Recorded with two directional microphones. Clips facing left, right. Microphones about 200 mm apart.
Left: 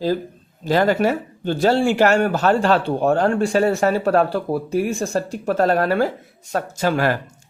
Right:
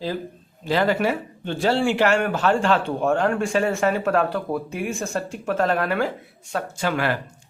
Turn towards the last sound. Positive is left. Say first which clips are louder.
# left 4 dB
turn(degrees=40)  # may be behind; listen again after turning